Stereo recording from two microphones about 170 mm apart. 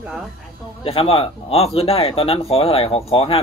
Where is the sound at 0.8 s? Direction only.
35° left (ahead or behind).